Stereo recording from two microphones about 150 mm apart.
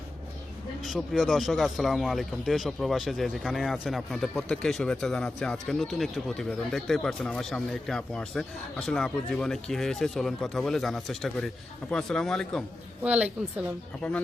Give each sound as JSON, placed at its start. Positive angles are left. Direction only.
{"t": 0.9, "sound": "speech", "side_deg": 0}
{"t": 13.0, "sound": "a woman's voice", "side_deg": -10}
{"t": 14.0, "sound": "speech", "side_deg": 5}